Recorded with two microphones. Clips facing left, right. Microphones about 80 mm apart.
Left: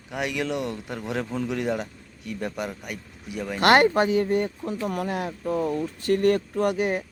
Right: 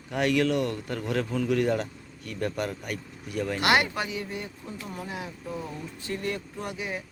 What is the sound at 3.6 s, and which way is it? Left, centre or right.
Speech, left.